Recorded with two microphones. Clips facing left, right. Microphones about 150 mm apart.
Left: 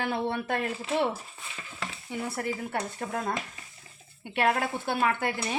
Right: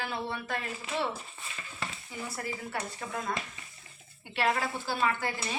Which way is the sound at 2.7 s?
45° left (ahead or behind).